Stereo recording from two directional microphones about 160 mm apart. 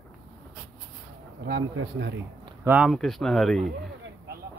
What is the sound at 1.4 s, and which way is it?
Speech, 90° right.